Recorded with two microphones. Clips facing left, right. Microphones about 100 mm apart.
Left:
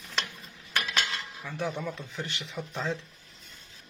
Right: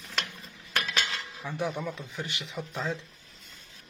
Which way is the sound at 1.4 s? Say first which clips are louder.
Right 1 dB; 15° right (ahead or behind).